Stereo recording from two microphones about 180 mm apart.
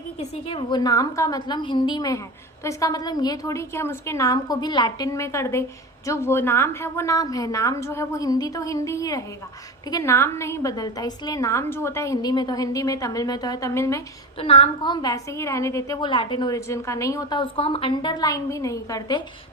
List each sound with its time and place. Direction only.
0.2 s a woman's voice: 30° left (ahead or behind); by 14.0 s 15° left (ahead or behind)
14.3 s a woman's voice: 30° left (ahead or behind)